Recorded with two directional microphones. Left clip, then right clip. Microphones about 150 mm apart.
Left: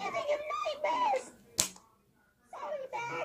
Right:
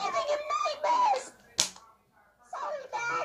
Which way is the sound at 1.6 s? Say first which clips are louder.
Right 4 dB; 55° left (ahead or behind).